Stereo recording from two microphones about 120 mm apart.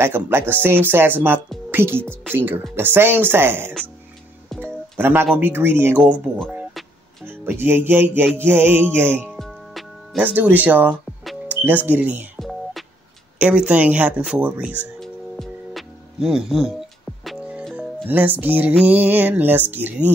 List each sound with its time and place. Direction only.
0.0 s music: 20° right (ahead or behind)
1.7 s speech: 20° right (ahead or behind)
2.3 s music: 15° right (ahead or behind)
4.6 s speech: 15° right (ahead or behind)
7.2 s music: 15° right (ahead or behind)
11.4 s speech: 15° right (ahead or behind)
12.4 s music: centre (ahead or behind)
15.0 s music: centre (ahead or behind)
17.7 s music: 15° right (ahead or behind)